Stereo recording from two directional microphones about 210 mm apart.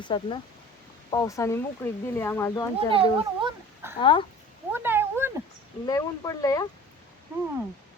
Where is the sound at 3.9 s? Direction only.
25° left (ahead or behind).